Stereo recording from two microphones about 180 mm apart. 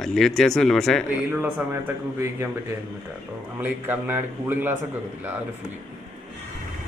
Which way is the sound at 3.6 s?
10° right (ahead or behind).